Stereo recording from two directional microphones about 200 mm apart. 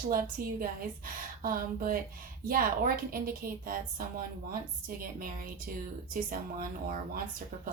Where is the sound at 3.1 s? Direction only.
45° right (ahead or behind).